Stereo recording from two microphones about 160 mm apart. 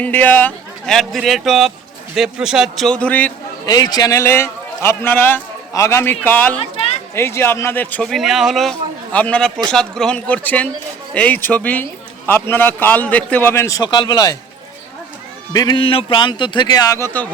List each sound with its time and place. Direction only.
0.0 s a man's voice: 10° left (ahead or behind)
3.7 s a man's voice: 25° left (ahead or behind)
15.5 s speech: 30° left (ahead or behind)